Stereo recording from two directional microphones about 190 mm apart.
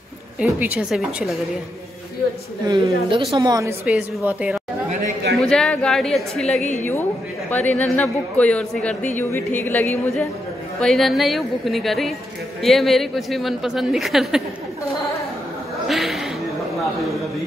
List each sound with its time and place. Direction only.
0.4 s a woman's voice: 5° right (ahead or behind)
2.6 s a woman's voice: 20° right (ahead or behind)
3.8 s a woman's voice: 10° right (ahead or behind)
5.3 s a woman's voice: 5° left (ahead or behind)
15.9 s a sound: centre (ahead or behind)